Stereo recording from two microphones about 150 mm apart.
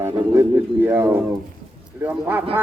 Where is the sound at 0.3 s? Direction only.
15° right (ahead or behind).